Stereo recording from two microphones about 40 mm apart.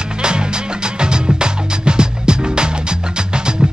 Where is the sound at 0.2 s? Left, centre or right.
Right.